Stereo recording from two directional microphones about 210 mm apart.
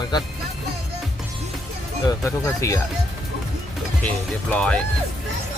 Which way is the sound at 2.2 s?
15° left (ahead or behind).